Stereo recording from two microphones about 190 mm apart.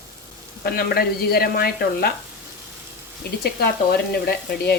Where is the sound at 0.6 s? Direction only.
55° left (ahead or behind).